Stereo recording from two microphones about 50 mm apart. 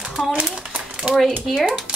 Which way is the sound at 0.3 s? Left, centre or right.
Right.